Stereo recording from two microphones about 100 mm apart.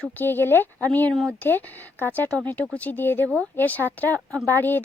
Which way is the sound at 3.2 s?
20° right (ahead or behind).